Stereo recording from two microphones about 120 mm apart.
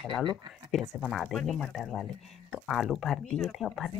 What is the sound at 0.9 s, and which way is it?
Speech, centre (ahead or behind).